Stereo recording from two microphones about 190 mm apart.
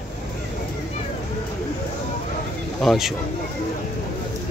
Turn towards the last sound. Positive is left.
turn(degrees=0)  # may be behind; listen again after turning